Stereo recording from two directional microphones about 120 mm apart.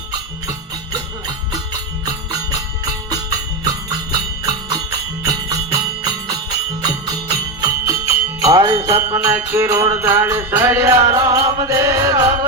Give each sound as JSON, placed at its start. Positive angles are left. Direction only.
{"t": 2.0, "sound": "music", "side_deg": -30}
{"t": 8.8, "sound": "jingle bell", "side_deg": -20}